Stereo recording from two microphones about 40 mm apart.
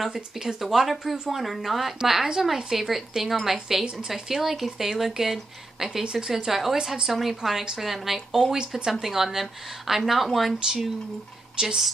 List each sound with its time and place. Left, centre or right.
0.1 s speech: centre
0.6 s speech: centre
8.5 s speech: right
9.0 s speech: centre
11.6 s speech: centre